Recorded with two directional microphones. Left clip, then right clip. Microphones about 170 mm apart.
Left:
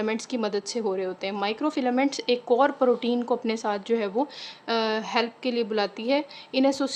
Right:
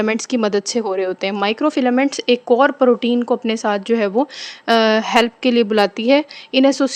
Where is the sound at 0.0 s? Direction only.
35° right (ahead or behind).